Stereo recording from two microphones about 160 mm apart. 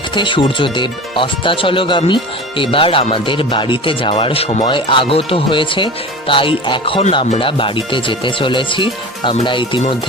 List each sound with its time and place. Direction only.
0.1 s speech: 30° left (ahead or behind)